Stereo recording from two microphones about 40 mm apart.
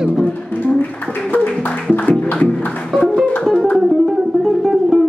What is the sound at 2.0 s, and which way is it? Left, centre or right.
Music, left.